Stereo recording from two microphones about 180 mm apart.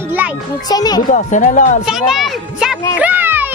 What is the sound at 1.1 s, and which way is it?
Speech, 45° left (ahead or behind).